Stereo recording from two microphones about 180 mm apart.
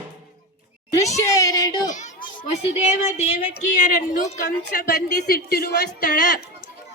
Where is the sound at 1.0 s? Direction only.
20° left (ahead or behind).